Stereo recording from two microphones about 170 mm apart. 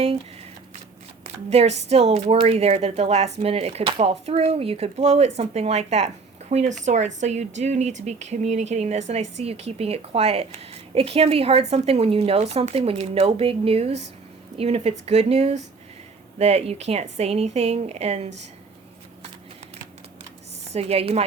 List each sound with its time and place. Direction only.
1.2 s speech: 40° right (ahead or behind)
20.7 s speech: 35° right (ahead or behind)